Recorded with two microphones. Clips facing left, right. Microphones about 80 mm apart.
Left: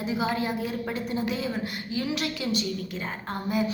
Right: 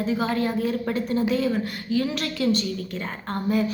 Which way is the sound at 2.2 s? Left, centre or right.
Centre.